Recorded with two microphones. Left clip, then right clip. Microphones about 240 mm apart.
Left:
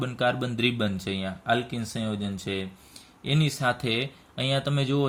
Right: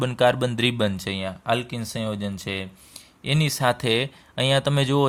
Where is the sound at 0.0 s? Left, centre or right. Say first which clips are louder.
Right 6 dB; right.